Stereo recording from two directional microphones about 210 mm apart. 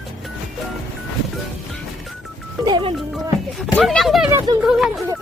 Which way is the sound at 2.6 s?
20° right (ahead or behind).